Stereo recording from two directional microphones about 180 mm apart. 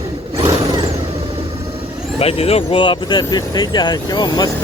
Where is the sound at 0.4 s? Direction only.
25° right (ahead or behind).